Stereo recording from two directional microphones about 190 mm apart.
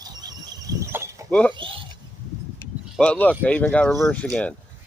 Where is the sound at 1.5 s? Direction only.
25° right (ahead or behind).